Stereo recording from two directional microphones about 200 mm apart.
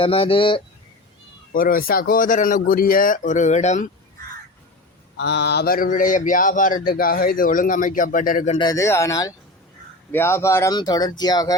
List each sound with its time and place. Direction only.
0.0 s speech: 25° left (ahead or behind)
1.5 s speech: 45° left (ahead or behind)
5.1 s speech: 55° left (ahead or behind)
8.5 s speech: 20° left (ahead or behind)